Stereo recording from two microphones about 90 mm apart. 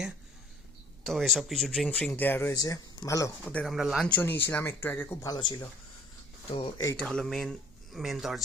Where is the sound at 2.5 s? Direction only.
40° left (ahead or behind).